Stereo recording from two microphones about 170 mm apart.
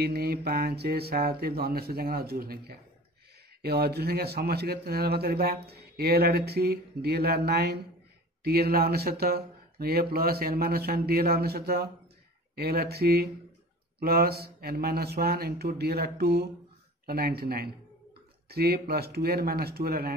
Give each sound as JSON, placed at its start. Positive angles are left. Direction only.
{"t": 0.0, "sound": "a man's voice", "side_deg": -65}